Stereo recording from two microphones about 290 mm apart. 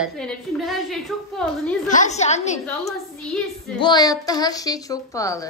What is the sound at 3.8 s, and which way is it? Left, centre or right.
A woman's voice, centre.